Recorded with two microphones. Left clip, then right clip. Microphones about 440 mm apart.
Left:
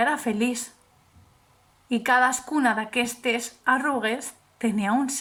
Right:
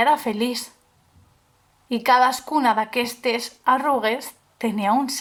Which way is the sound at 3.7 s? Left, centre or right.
Centre.